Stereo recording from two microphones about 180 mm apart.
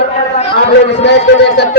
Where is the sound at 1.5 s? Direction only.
70° left (ahead or behind).